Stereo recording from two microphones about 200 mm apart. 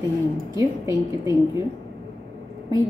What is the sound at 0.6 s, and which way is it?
Speech, 15° right (ahead or behind).